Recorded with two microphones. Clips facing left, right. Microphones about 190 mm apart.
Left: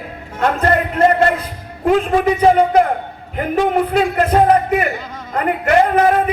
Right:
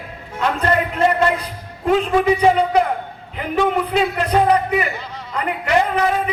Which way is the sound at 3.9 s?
50° left (ahead or behind).